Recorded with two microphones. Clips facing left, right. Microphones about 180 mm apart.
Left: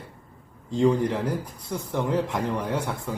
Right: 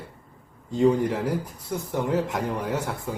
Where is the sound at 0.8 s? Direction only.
5° right (ahead or behind).